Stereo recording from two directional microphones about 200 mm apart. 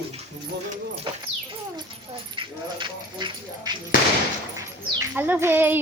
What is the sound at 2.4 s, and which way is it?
Speech, 25° right (ahead or behind).